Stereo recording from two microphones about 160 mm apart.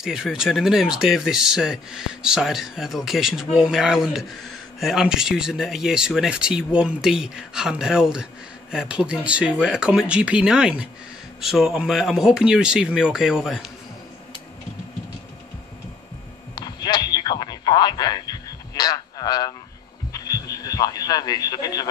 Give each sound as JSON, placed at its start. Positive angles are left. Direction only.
{"t": 0.0, "sound": "speech", "side_deg": -5}
{"t": 16.5, "sound": "radio", "side_deg": 25}
{"t": 20.1, "sound": "heart sounds", "side_deg": 20}
{"t": 20.6, "sound": "a man's voice", "side_deg": 25}